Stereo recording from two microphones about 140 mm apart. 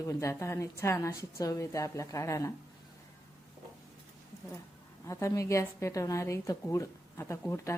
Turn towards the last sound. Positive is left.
turn(degrees=15)  # may be behind; listen again after turning